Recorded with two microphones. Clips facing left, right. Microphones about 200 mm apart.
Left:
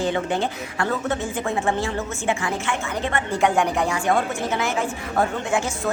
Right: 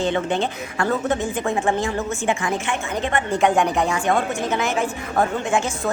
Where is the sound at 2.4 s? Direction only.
20° right (ahead or behind).